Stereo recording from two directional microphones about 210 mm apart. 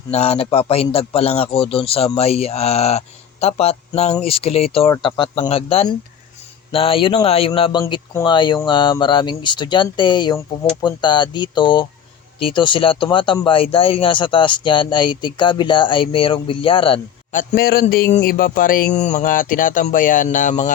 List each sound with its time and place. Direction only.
0.1 s speech: 30° left (ahead or behind)
17.3 s speech: 45° left (ahead or behind)